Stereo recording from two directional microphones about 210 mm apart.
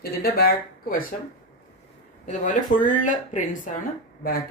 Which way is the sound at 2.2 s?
35° left (ahead or behind).